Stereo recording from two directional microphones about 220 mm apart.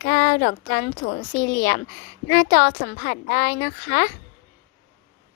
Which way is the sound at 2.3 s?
45° left (ahead or behind).